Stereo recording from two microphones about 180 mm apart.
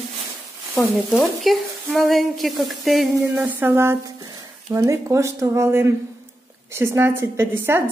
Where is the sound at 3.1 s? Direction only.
15° right (ahead or behind).